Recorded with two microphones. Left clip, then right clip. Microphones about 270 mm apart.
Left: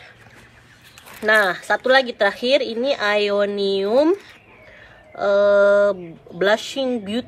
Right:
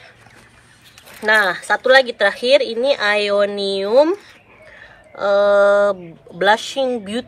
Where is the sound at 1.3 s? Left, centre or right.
Right.